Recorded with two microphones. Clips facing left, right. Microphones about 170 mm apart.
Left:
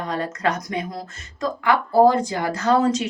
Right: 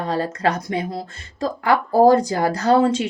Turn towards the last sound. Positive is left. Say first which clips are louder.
# right 2 dB
turn(degrees=-30)  # may be behind; listen again after turning